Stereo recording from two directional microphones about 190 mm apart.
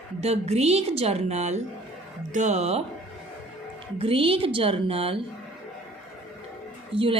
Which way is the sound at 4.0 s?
30° right (ahead or behind).